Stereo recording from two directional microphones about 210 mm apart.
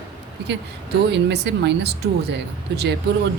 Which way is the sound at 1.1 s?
55° right (ahead or behind).